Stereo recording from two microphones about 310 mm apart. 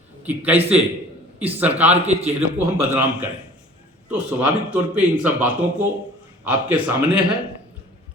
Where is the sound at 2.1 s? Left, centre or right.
Right.